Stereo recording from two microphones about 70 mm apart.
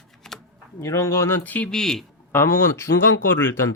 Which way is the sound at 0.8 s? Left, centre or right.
Left.